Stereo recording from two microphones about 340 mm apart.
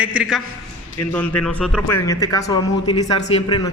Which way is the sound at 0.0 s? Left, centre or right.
Centre.